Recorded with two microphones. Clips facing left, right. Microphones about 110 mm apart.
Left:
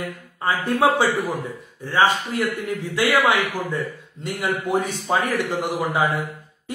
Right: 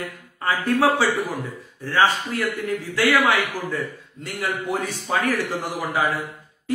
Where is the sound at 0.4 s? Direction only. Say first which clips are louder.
Even; 15° left (ahead or behind).